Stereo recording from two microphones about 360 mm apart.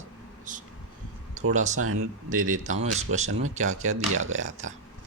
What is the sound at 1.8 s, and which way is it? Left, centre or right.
Speech, right.